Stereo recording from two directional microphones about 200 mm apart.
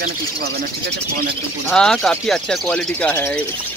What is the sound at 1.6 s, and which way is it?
Speech, 5° left (ahead or behind).